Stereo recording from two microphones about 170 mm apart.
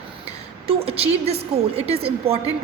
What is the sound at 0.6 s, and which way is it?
A woman's voice, 35° right (ahead or behind).